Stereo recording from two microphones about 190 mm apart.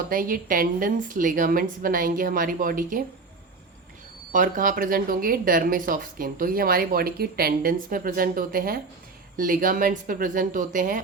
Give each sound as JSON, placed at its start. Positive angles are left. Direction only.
{"t": 0.1, "sound": "speech", "side_deg": -45}
{"t": 4.3, "sound": "speech", "side_deg": -45}